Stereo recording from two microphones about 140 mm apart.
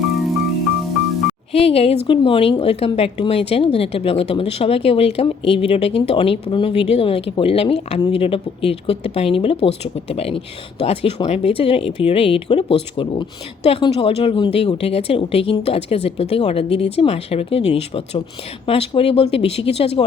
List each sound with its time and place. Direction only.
1.5 s speech: 45° left (ahead or behind)